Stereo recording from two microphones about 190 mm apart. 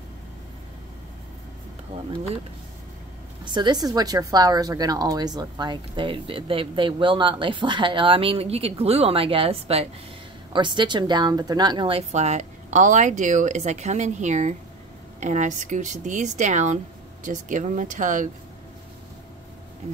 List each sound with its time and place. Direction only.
3.4 s a woman's voice: 25° right (ahead or behind); by 18.3 s 45° right (ahead or behind)